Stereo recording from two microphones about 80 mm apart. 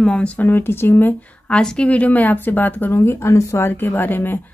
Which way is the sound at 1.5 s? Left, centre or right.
Centre.